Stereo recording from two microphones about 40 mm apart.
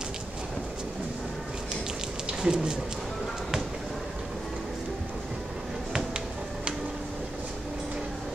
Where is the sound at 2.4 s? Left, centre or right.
Right.